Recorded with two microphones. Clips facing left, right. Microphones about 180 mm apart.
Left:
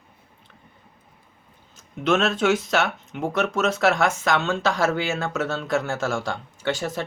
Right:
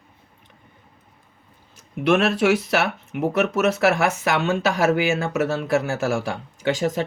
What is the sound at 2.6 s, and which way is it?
Speech, 10° right (ahead or behind).